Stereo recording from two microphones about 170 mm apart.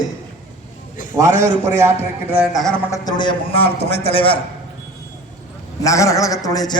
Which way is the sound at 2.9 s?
20° left (ahead or behind).